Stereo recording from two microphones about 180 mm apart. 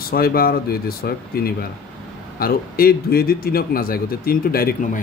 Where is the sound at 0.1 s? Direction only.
55° left (ahead or behind).